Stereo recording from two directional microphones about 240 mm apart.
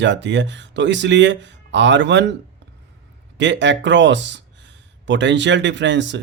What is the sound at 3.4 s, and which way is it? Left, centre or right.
Speech, right.